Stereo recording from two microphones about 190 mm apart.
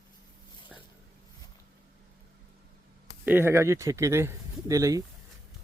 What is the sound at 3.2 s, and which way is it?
Speech, 10° right (ahead or behind).